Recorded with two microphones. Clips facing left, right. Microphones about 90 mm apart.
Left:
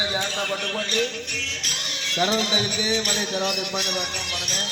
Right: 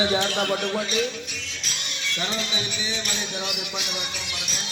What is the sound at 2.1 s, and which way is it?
Music, 85° left.